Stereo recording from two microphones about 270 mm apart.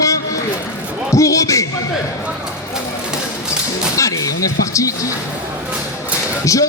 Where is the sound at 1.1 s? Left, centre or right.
Centre.